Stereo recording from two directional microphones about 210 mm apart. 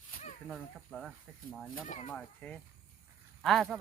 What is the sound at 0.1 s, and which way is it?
Snake, 35° left (ahead or behind).